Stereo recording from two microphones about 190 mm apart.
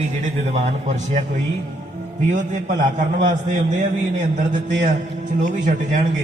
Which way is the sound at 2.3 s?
40° right (ahead or behind).